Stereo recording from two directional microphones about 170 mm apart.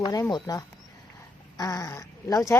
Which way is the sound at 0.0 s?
20° left (ahead or behind).